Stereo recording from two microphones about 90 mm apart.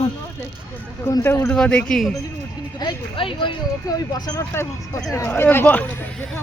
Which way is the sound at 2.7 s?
65° left (ahead or behind).